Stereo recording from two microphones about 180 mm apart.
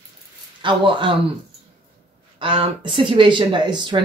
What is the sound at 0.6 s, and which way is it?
Speech, 25° right (ahead or behind).